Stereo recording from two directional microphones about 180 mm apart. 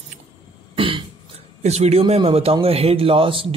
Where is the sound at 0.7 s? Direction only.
30° right (ahead or behind).